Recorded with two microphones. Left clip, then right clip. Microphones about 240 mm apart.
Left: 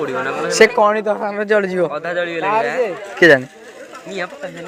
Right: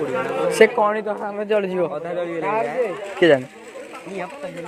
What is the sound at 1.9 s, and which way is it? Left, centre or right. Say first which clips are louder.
A man's voice: left 5 dB; left.